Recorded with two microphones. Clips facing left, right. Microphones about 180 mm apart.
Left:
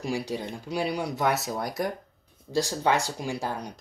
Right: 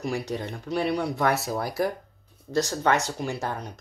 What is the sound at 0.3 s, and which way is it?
Speech, 10° left (ahead or behind).